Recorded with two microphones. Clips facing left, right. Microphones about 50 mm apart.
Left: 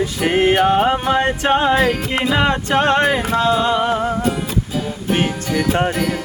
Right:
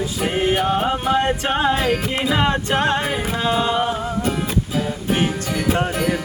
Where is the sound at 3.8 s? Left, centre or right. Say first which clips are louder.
Left 4 dB; left.